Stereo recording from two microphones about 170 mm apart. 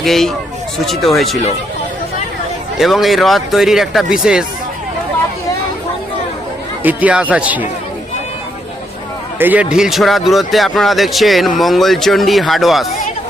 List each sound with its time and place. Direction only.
0.0 s speech: centre (ahead or behind)
2.7 s speech: centre (ahead or behind)
6.8 s speech: 10° right (ahead or behind)
9.4 s speech: 10° right (ahead or behind)